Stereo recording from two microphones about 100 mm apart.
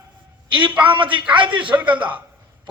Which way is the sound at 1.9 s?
15° right (ahead or behind).